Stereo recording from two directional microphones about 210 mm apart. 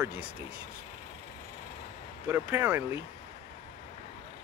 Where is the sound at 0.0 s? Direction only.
10° right (ahead or behind).